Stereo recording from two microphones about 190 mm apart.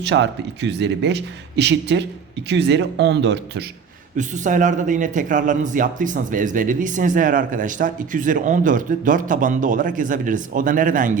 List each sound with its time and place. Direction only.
0.0 s a man's voice: 70° right (ahead or behind)
4.2 s a man's voice: 40° right (ahead or behind)